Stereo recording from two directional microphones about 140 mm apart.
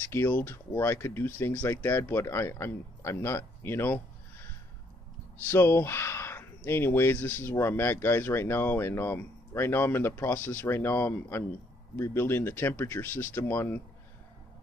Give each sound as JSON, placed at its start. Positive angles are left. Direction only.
{"t": 0.1, "sound": "speech", "side_deg": 15}
{"t": 5.5, "sound": "speech", "side_deg": 15}